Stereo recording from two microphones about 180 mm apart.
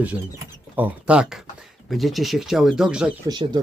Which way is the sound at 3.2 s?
25° right (ahead or behind).